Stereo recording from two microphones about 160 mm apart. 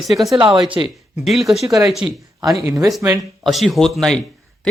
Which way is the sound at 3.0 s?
20° right (ahead or behind).